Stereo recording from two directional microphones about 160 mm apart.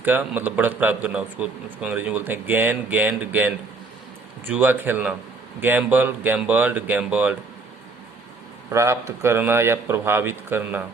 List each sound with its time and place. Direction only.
0.0 s a man's voice: 10° right (ahead or behind)
8.7 s a man's voice: 20° right (ahead or behind)